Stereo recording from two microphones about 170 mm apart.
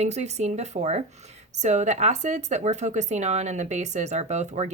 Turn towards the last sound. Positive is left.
turn(degrees=-40)  # may be behind; listen again after turning